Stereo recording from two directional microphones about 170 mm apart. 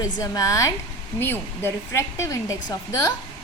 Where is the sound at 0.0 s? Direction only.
20° left (ahead or behind).